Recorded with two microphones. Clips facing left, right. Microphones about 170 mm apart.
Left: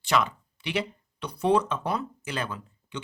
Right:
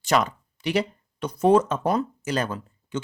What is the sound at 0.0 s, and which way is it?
Speech, 45° right (ahead or behind).